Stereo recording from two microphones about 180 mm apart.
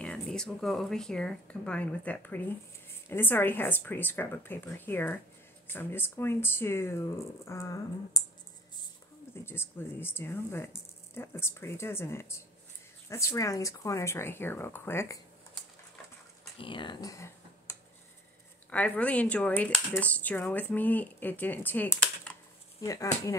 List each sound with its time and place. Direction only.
0.0 s speech: 5° left (ahead or behind)
9.3 s speech: 15° left (ahead or behind)
16.5 s speech: 30° left (ahead or behind); by 22.4 s 10° left (ahead or behind)
22.8 s speech: 20° left (ahead or behind)